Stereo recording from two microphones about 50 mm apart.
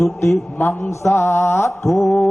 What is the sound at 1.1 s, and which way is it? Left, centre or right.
Mantra, left.